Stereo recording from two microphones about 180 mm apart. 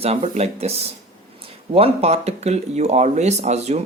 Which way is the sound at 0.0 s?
35° right (ahead or behind).